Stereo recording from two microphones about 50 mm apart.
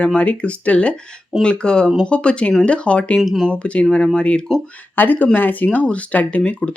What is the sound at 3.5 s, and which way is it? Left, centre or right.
Speech, left.